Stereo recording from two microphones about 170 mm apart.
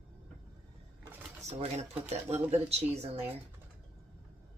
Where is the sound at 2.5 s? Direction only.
40° right (ahead or behind).